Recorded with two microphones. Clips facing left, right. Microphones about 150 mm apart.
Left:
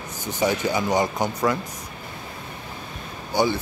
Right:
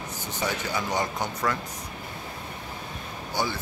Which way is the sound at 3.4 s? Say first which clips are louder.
Left 8 dB; 15° left (ahead or behind).